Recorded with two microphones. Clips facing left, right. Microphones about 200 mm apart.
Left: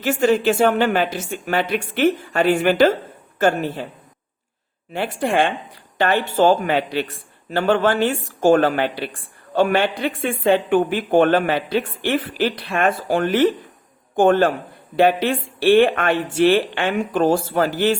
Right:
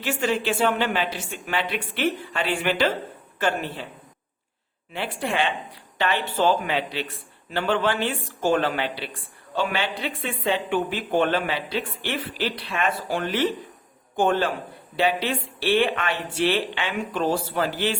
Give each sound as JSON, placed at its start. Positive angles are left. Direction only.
{"t": 0.0, "sound": "speech", "side_deg": 45}
{"t": 4.9, "sound": "speech", "side_deg": 45}